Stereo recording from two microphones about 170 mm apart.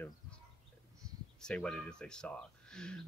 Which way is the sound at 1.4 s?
5° left (ahead or behind).